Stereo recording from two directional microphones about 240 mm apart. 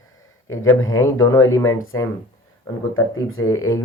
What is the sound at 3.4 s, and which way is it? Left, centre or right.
Mantra, centre.